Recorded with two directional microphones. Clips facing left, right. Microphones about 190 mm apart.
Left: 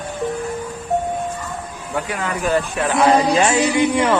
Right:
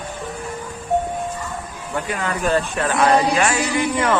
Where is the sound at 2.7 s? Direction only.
15° left (ahead or behind).